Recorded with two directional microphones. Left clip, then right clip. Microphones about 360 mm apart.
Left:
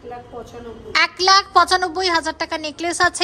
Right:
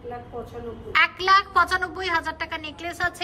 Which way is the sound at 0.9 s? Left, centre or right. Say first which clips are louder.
Left 4 dB; centre.